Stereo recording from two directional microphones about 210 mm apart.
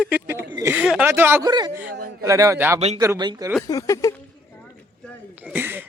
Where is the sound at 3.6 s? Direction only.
15° left (ahead or behind).